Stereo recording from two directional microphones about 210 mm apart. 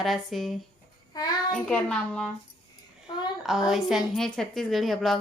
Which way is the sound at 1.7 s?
5° left (ahead or behind).